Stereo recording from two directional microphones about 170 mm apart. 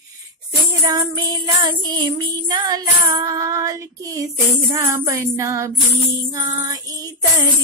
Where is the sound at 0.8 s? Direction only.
25° right (ahead or behind).